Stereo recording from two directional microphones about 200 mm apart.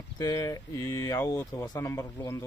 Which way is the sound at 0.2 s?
20° left (ahead or behind).